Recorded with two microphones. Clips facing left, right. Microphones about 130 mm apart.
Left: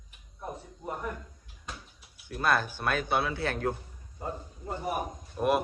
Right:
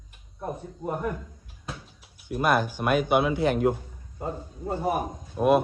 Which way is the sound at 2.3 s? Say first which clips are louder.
Right 4 dB; 15° right (ahead or behind).